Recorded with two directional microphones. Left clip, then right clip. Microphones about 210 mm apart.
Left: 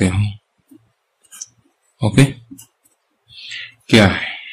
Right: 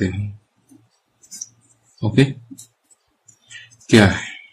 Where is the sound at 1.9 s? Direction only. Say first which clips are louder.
Left 2 dB; 25° left (ahead or behind).